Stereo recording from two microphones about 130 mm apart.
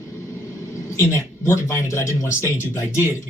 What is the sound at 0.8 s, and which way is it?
Speech, 20° left (ahead or behind).